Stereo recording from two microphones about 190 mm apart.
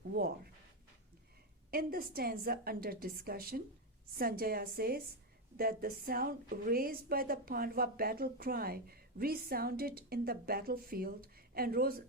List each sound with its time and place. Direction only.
0.1 s speech: 55° right (ahead or behind)
1.7 s a woman's voice: 50° right (ahead or behind)